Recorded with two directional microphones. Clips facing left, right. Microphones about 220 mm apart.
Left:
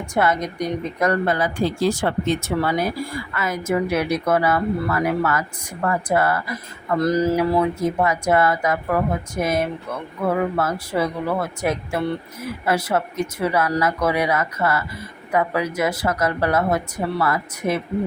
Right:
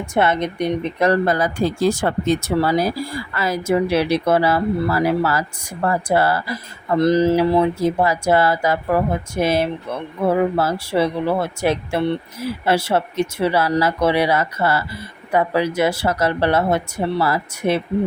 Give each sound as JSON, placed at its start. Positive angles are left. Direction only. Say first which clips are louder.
{"t": 0.1, "sound": "speech", "louder": "right 2 dB", "side_deg": -25}